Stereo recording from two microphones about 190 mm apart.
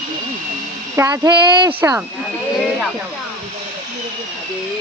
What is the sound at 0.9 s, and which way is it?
Speech, 15° right (ahead or behind).